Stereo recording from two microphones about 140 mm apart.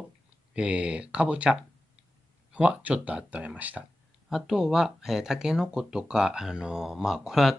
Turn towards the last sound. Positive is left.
turn(degrees=-5)  # may be behind; listen again after turning